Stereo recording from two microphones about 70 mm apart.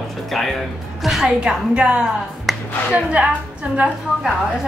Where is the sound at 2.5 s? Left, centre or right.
Centre.